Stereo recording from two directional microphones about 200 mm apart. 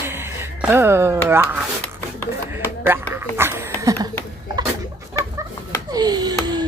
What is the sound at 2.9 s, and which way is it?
Speech, 15° right (ahead or behind).